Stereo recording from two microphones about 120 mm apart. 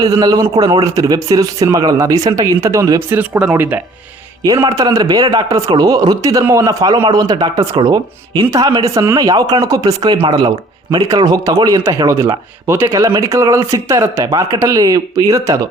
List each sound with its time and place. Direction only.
0.0 s speech: 30° right (ahead or behind)
3.1 s speech: 15° right (ahead or behind)
4.6 s speech: 30° right (ahead or behind)
5.5 s speech: 30° right (ahead or behind)